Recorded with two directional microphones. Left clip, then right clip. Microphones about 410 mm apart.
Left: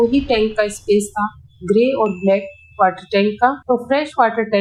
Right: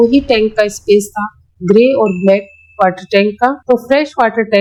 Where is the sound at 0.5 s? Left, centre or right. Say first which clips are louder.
Right 6 dB; right.